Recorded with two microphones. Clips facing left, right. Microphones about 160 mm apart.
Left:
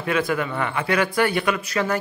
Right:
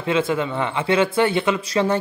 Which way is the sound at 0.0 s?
25° right (ahead or behind).